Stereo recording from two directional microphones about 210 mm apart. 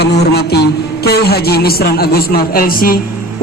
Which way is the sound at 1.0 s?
50° left (ahead or behind).